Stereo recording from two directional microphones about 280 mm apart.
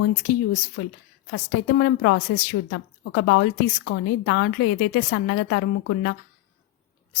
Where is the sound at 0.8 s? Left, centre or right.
Left.